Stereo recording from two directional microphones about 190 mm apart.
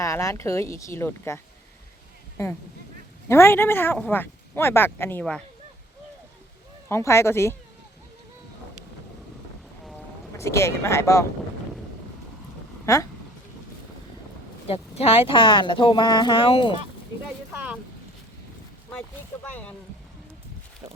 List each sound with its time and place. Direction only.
0.0 s speech: 15° left (ahead or behind)
3.2 s speech: 15° left (ahead or behind)
6.8 s speech: 15° left (ahead or behind)
10.3 s speech: 15° left (ahead or behind)
12.8 s speech: 15° left (ahead or behind)
14.7 s speech: 30° left (ahead or behind)
17.5 s a sound: 10° right (ahead or behind)